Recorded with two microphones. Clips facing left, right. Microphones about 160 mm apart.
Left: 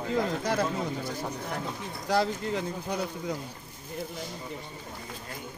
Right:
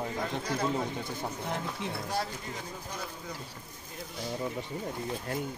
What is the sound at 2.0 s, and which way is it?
Speech, 80° left.